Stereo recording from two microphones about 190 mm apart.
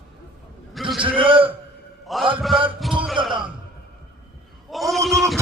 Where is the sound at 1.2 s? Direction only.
25° right (ahead or behind).